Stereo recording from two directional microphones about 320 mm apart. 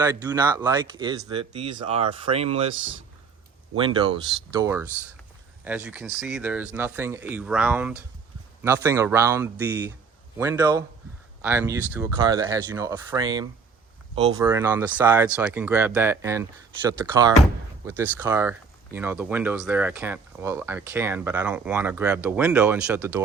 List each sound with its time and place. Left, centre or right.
0.0 s speech: centre
3.8 s speech: centre